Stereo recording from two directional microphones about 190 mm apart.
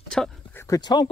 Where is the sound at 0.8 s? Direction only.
25° left (ahead or behind).